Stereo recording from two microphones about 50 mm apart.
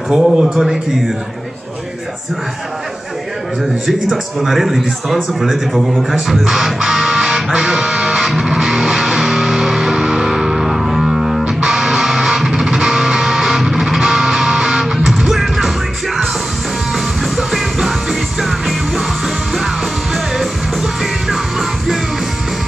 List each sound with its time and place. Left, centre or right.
0.1 s a man's voice: centre
3.6 s a man's voice: centre
6.2 s music: centre
16.9 s music: centre
20.8 s music: centre